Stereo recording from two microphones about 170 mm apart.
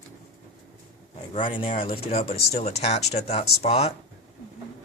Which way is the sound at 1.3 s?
30° left (ahead or behind).